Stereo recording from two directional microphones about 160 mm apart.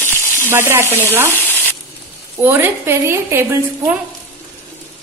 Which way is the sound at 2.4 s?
10° right (ahead or behind).